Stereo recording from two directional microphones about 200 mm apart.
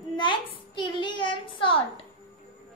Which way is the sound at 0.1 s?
25° left (ahead or behind).